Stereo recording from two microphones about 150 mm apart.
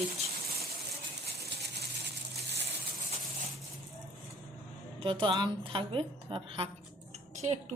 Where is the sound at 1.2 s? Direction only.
90° right.